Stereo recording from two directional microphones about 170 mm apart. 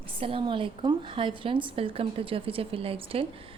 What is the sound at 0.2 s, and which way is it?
A woman's voice, 30° right (ahead or behind).